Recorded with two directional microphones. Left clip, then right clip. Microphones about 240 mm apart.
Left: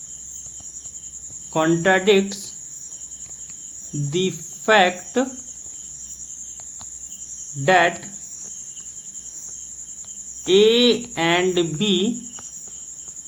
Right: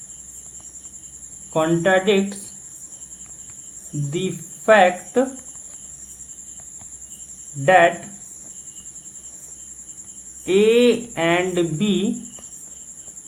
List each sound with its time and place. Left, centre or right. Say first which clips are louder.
1.5 s speech: even; left
4.1 s speech: left 3 dB; left
7.6 s speech: right 3 dB; left
10.4 s speech: even; left